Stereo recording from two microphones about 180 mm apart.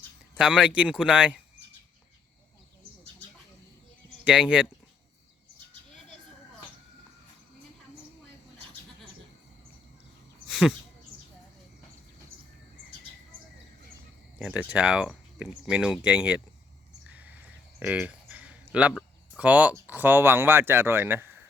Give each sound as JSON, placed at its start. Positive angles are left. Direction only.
{"t": 0.3, "sound": "speech", "side_deg": -5}
{"t": 4.2, "sound": "speech", "side_deg": -5}
{"t": 10.4, "sound": "a sound", "side_deg": 0}
{"t": 14.3, "sound": "speech", "side_deg": -5}
{"t": 17.1, "sound": "a sound", "side_deg": -10}
{"t": 17.7, "sound": "speech", "side_deg": -5}